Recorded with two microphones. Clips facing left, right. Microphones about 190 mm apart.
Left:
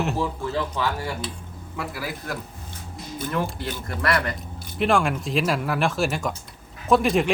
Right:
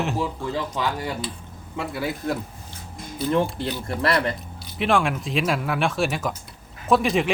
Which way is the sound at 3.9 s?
25° right (ahead or behind).